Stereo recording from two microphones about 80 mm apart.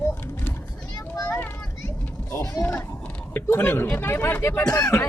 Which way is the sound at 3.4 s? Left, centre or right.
Left.